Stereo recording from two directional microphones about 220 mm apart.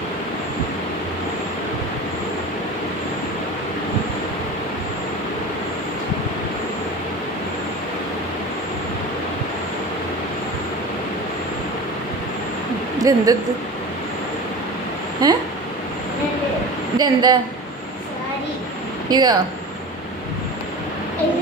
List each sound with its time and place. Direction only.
13.0 s speech: 15° right (ahead or behind)
15.2 s vehicle: 20° right (ahead or behind)
17.0 s speech: 20° right (ahead or behind)
19.0 s speech: 20° right (ahead or behind)